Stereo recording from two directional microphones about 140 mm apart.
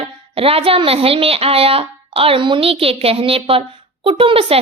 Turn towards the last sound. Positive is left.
turn(degrees=-40)  # may be behind; listen again after turning